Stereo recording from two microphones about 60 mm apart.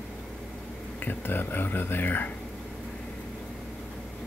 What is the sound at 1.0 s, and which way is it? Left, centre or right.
Speech, left.